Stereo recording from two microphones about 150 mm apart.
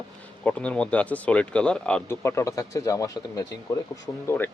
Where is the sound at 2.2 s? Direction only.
20° left (ahead or behind).